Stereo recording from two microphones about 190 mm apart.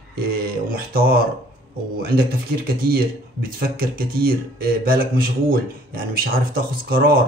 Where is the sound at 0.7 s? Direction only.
50° right (ahead or behind).